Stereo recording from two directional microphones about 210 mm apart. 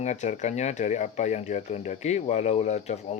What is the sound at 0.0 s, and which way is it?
Speech, 35° left (ahead or behind).